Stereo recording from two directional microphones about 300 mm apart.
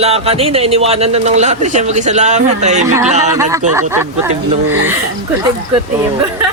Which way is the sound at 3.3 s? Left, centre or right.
Centre.